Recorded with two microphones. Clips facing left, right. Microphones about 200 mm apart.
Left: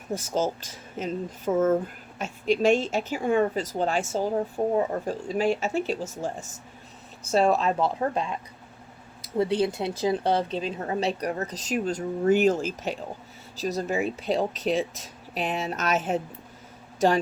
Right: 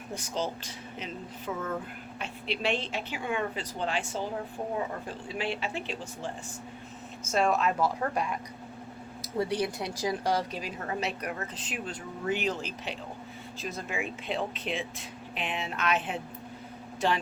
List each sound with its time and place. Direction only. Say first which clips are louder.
0.1 s a woman's voice: left 7 dB; 45° left (ahead or behind); by 8.4 s 25° left (ahead or behind)
9.4 s a woman's voice: left 6 dB; 25° left (ahead or behind); by 17.2 s 45° left (ahead or behind)